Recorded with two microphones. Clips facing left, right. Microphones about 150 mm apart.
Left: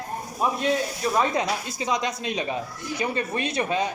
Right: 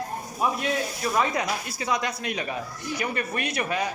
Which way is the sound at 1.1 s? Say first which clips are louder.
Left 2 dB; 25° left (ahead or behind).